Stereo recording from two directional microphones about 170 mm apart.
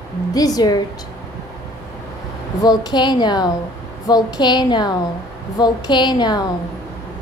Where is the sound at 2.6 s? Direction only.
25° left (ahead or behind).